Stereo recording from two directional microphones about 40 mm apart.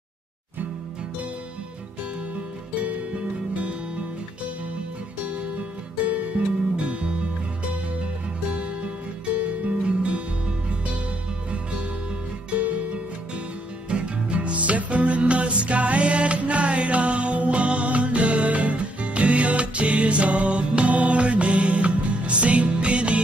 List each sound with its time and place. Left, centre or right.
6.4 s music: right
6.8 s music: right
9.6 s music: right
13.8 s music: right